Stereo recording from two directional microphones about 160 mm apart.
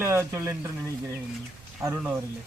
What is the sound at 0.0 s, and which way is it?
Speech, 15° right (ahead or behind).